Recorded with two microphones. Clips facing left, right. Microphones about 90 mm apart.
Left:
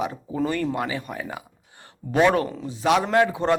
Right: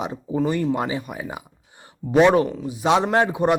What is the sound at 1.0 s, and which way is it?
Speech, 10° right (ahead or behind).